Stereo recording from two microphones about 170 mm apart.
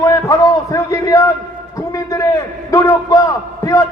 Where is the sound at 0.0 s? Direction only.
20° left (ahead or behind).